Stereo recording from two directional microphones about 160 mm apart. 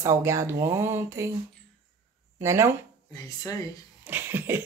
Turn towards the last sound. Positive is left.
turn(degrees=-15)  # may be behind; listen again after turning